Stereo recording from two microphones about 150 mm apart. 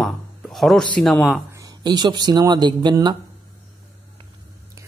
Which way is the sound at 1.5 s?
25° right (ahead or behind).